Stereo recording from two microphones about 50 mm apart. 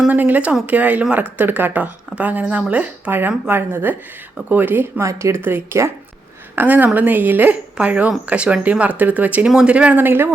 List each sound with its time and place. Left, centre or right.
0.1 s speech: right
3.1 s a woman's voice: right
4.9 s speech: right
5.4 s a woman's voice: right
6.6 s speech: right
10.0 s a woman's voice: right